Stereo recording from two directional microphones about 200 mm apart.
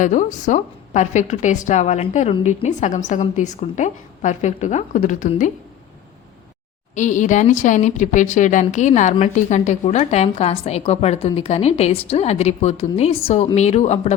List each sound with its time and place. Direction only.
0.0 s a woman's voice: 40° left (ahead or behind)
6.9 s a woman's voice: 40° left (ahead or behind)